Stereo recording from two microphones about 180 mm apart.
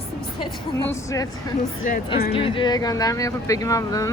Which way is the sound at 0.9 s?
20° left (ahead or behind).